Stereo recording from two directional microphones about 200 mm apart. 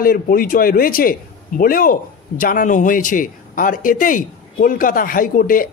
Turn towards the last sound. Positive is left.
turn(degrees=45)  # may be behind; listen again after turning